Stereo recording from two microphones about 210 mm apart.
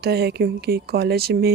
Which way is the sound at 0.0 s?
50° right (ahead or behind).